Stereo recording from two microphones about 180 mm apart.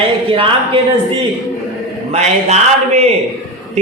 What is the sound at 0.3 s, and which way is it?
Speech, 30° right (ahead or behind).